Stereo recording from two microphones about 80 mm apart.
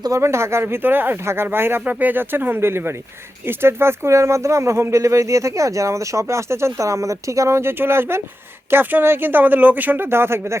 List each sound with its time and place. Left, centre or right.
0.2 s speech: right